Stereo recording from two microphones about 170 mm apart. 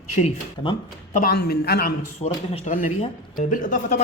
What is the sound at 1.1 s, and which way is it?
Speech, 65° left (ahead or behind).